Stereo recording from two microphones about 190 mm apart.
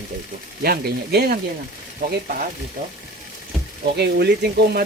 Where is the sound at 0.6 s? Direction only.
55° right (ahead or behind).